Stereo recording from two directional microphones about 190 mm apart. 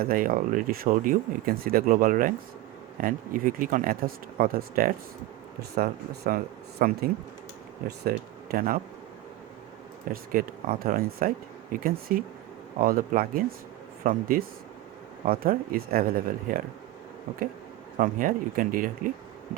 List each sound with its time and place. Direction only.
0.0 s speech: 50° right (ahead or behind)
10.1 s speech: 45° right (ahead or behind)
17.9 s speech: 45° right (ahead or behind)